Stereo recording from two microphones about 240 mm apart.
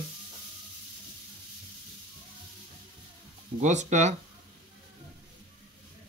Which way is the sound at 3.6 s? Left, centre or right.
Right.